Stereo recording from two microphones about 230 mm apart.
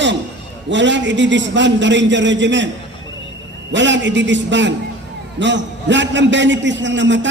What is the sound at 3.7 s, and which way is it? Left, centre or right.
A man's voice, right.